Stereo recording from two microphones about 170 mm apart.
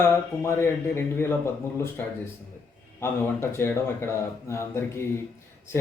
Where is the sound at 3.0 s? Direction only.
15° left (ahead or behind).